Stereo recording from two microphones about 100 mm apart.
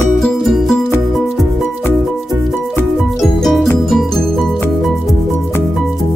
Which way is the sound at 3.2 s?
Centre (ahead or behind).